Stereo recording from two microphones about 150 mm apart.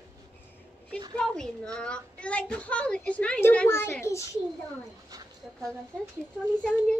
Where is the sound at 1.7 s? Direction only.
5° left (ahead or behind).